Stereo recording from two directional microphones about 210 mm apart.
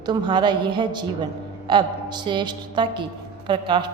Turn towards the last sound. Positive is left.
turn(degrees=-20)  # may be behind; listen again after turning